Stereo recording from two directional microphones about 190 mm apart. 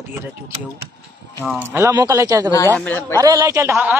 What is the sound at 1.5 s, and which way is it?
Speech, 10° right (ahead or behind).